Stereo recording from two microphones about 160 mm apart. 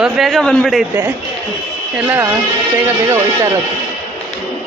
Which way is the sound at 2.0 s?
10° right (ahead or behind).